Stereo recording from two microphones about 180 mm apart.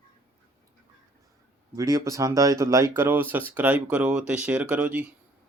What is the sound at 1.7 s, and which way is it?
Speech, 20° right (ahead or behind).